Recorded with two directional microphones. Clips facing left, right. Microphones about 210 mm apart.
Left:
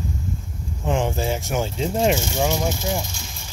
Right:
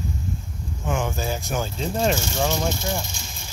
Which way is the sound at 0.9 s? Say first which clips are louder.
Left 4 dB; 25° left (ahead or behind).